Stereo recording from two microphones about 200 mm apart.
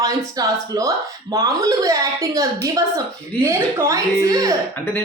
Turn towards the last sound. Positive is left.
turn(degrees=-15)  # may be behind; listen again after turning